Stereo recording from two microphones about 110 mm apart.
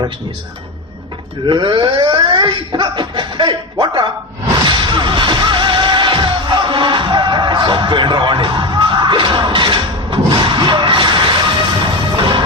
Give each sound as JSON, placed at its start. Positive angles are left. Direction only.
{"t": 1.5, "sound": "speech", "side_deg": -45}
{"t": 4.6, "sound": "music", "side_deg": -45}